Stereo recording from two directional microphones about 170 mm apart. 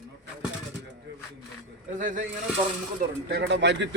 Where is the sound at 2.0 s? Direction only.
50° right (ahead or behind).